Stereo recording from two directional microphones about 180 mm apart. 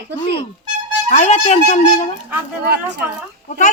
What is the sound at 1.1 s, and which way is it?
Speech, 40° left (ahead or behind).